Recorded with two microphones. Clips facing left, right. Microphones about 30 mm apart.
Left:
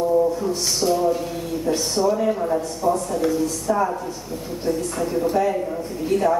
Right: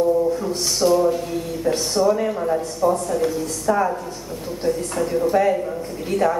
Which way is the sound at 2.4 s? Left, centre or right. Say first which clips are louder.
Right 2 dB; centre.